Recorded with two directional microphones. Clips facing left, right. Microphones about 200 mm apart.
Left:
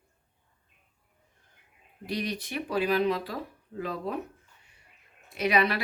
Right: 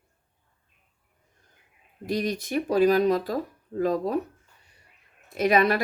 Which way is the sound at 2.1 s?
45° right (ahead or behind).